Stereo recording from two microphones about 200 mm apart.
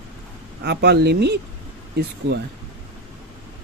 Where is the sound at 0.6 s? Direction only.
55° right (ahead or behind).